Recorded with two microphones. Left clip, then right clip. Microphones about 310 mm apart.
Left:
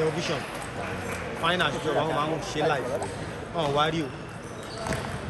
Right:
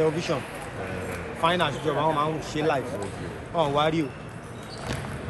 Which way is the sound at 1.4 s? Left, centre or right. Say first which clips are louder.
Right 2 dB; centre.